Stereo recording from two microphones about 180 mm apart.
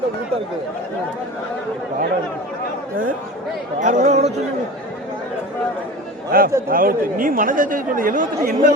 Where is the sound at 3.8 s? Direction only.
40° right (ahead or behind).